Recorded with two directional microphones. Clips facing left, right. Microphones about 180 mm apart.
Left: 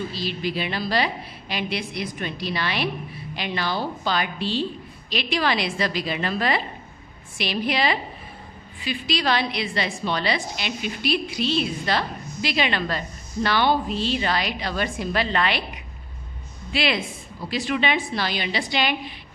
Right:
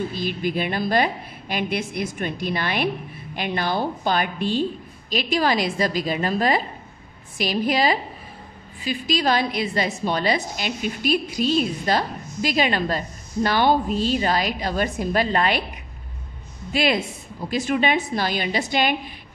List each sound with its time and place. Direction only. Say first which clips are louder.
0.1 s a woman's voice: right 3 dB; 50° right (ahead or behind)
16.7 s a woman's voice: right 3 dB; 45° right (ahead or behind)